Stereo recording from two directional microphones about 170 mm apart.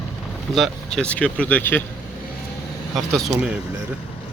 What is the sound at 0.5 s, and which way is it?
Speech, centre (ahead or behind).